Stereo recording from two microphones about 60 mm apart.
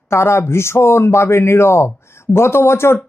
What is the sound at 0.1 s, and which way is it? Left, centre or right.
Speech, left.